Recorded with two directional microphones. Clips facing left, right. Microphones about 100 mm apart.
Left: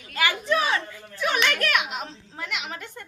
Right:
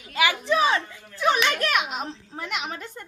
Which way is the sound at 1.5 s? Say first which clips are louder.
Right 1 dB; 30° right (ahead or behind).